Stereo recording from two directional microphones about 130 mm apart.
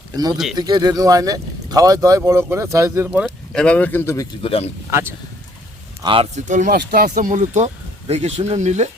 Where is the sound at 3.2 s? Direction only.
5° left (ahead or behind).